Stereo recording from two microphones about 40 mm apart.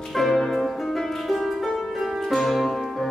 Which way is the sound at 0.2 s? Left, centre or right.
Centre.